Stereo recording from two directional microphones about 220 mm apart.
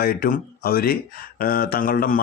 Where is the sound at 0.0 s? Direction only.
40° left (ahead or behind).